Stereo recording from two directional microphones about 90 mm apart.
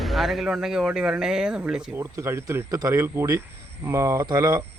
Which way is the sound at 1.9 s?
30° right (ahead or behind).